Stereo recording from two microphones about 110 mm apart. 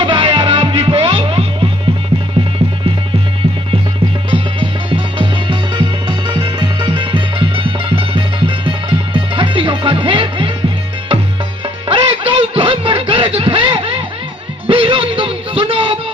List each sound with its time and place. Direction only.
0.0 s music: 50° right (ahead or behind)
4.3 s music: 50° right (ahead or behind)
11.6 s music: 55° right (ahead or behind)